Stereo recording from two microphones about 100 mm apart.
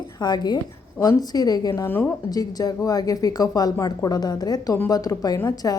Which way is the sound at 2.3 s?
40° left (ahead or behind).